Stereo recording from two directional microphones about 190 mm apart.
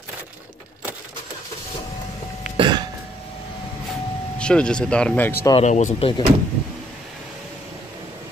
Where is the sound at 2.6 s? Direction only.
25° right (ahead or behind).